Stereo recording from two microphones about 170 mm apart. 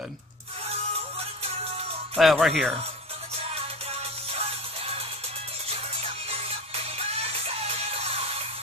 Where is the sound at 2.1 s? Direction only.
Centre (ahead or behind).